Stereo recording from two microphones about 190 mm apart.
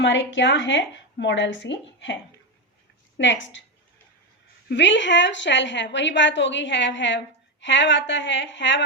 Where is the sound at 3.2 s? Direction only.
75° left (ahead or behind).